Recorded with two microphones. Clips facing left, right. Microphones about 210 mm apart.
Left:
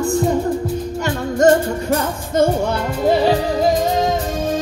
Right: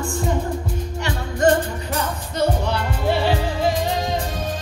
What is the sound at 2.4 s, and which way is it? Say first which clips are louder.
Music: left 5 dB; 45° left (ahead or behind).